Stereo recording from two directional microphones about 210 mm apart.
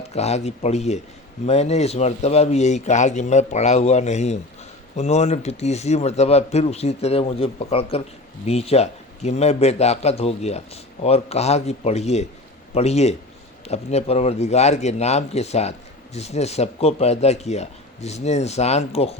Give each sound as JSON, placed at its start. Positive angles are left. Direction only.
{"t": 0.1, "sound": "a man's voice", "side_deg": 30}